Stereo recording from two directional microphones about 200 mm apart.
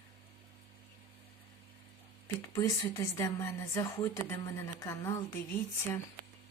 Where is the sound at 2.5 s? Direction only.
15° left (ahead or behind).